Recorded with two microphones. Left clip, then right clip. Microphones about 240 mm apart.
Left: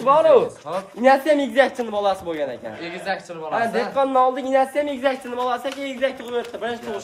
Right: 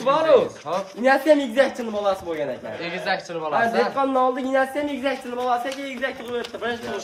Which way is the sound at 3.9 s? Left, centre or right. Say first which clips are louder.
Left 3 dB; left.